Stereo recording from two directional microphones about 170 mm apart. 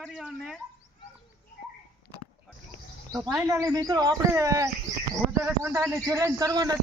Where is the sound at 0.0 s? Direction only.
Centre (ahead or behind).